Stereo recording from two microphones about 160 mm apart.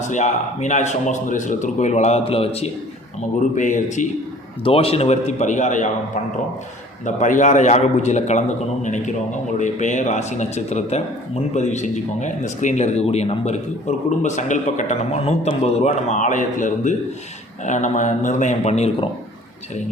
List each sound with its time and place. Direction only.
0.1 s speech: 50° left (ahead or behind)
3.5 s speech: 50° left (ahead or behind)
4.6 s speech: 35° left (ahead or behind)
7.0 s speech: 50° left (ahead or behind)